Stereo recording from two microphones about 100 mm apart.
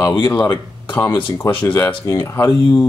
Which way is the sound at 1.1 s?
50° left (ahead or behind).